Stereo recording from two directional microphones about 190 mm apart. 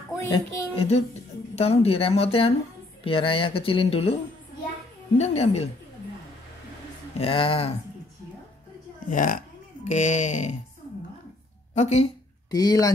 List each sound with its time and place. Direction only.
0.3 s speech: 30° left (ahead or behind)
7.2 s speech: 30° left (ahead or behind)
9.1 s speech: 45° left (ahead or behind)
11.7 s speech: 35° left (ahead or behind)
12.4 s speech: 20° left (ahead or behind)